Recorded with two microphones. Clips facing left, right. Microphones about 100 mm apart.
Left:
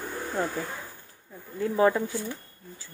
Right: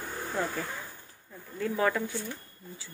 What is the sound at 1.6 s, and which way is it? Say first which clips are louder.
Speech: left 5 dB; 25° left (ahead or behind).